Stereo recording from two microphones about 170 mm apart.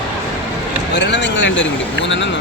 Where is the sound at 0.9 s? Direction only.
90° left.